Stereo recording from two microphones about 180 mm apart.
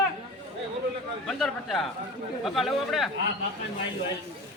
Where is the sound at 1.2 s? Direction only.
Centre (ahead or behind).